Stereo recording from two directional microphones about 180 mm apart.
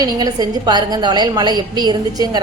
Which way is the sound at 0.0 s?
20° right (ahead or behind).